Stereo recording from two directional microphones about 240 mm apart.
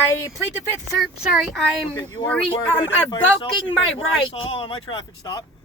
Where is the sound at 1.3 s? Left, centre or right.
Centre.